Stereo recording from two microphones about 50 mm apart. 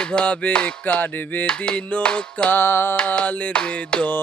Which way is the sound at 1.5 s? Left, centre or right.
Left.